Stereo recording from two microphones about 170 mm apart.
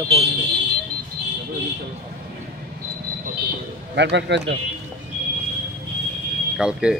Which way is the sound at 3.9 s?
90° right.